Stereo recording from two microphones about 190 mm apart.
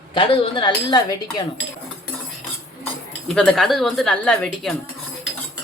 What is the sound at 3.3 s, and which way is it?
Speech, 5° left (ahead or behind).